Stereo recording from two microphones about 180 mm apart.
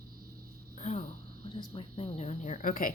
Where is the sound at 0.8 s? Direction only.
40° left (ahead or behind).